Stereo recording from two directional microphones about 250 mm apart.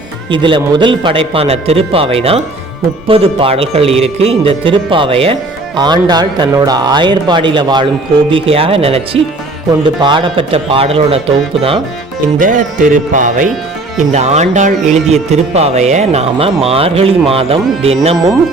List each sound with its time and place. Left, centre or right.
0.3 s speech: centre